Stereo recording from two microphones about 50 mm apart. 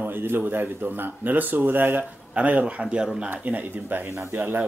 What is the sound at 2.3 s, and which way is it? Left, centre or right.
Speech, right.